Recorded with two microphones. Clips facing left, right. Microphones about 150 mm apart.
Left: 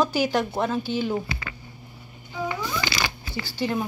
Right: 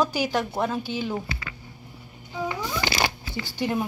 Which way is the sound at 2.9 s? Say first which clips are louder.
Right 3 dB; 50° right (ahead or behind).